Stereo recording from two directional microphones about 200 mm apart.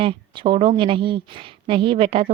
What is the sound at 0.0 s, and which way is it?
Speech, 25° right (ahead or behind).